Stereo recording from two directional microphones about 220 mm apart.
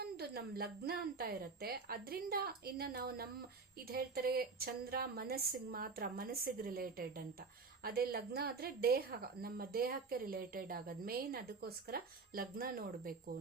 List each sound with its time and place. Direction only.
0.0 s speech: 45° right (ahead or behind)